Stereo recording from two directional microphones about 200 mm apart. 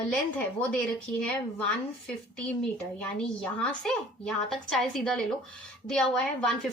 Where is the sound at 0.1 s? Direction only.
5° left (ahead or behind).